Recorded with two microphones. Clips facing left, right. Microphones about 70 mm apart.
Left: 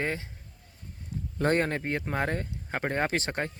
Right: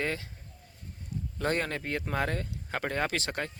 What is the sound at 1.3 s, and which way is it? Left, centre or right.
Speech, left.